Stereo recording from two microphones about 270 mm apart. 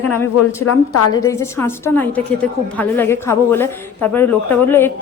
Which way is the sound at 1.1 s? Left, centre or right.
Centre.